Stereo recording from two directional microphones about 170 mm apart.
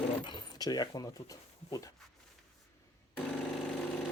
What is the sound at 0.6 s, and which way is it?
Speech, 25° left (ahead or behind).